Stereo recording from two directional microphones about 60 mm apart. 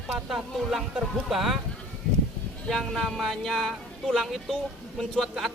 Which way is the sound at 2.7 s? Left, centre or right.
Centre.